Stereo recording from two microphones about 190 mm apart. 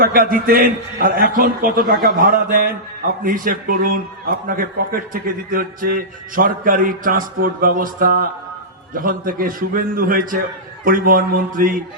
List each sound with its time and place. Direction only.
0.0 s a man's voice: 50° right (ahead or behind)